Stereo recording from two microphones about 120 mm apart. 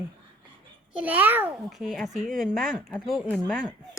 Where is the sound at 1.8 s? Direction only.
5° left (ahead or behind).